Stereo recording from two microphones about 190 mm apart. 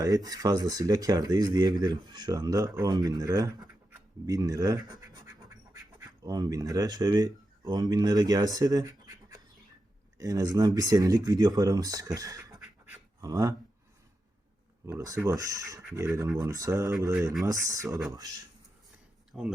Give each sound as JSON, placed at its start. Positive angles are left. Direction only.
{"t": 0.0, "sound": "speech", "side_deg": -20}
{"t": 14.8, "sound": "speech", "side_deg": -15}
{"t": 19.3, "sound": "speech", "side_deg": 0}